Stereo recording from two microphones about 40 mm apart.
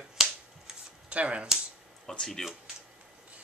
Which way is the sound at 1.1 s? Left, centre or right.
Right.